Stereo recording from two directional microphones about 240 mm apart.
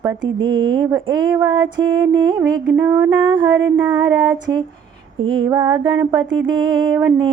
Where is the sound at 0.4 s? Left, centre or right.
Centre.